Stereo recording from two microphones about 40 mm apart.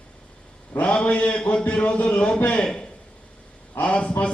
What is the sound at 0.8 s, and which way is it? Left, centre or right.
A man's voice, left.